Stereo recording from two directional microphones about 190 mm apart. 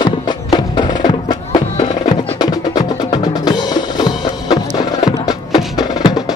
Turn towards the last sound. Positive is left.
turn(degrees=20)  # may be behind; listen again after turning